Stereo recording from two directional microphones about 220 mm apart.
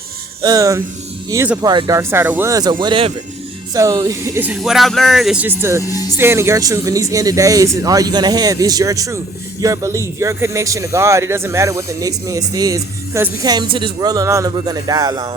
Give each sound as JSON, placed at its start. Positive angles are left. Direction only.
{"t": 0.4, "sound": "speech", "side_deg": -15}
{"t": 5.8, "sound": "speech", "side_deg": 15}
{"t": 6.1, "sound": "speech", "side_deg": -10}